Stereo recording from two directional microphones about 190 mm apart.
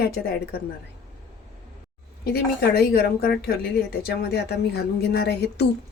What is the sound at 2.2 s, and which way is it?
A woman's voice, 55° left (ahead or behind).